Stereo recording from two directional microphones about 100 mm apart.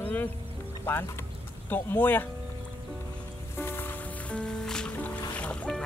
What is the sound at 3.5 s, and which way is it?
Music, 20° left (ahead or behind).